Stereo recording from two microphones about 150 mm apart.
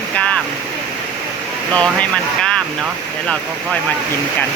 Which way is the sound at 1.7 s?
5° left (ahead or behind).